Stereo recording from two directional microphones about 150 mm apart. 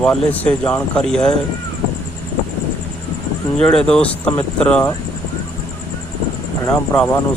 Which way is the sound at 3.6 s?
5° left (ahead or behind).